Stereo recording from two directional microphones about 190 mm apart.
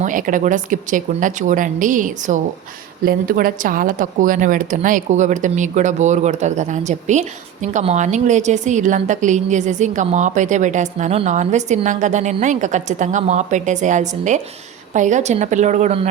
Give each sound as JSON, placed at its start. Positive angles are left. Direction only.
{"t": 0.0, "sound": "speech", "side_deg": -45}